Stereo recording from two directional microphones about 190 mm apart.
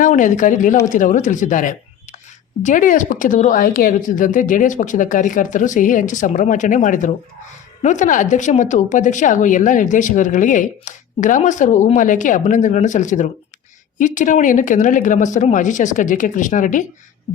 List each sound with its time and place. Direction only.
0.0 s speech: 40° left (ahead or behind)